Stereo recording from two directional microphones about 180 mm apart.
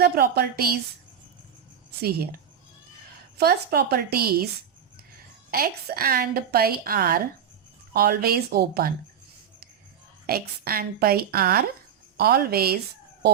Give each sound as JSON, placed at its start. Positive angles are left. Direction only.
{"t": 0.0, "sound": "a woman's voice", "side_deg": -60}
{"t": 2.0, "sound": "a woman's voice", "side_deg": -60}
{"t": 3.3, "sound": "a woman's voice", "side_deg": -60}
{"t": 5.5, "sound": "a woman's voice", "side_deg": -60}
{"t": 10.2, "sound": "a woman's voice", "side_deg": -55}